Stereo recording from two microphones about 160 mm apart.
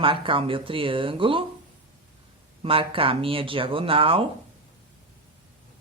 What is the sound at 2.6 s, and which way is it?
Speech, 35° right (ahead or behind).